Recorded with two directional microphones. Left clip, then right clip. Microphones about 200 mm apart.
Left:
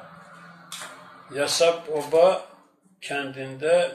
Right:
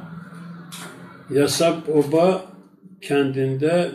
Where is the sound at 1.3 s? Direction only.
Centre (ahead or behind).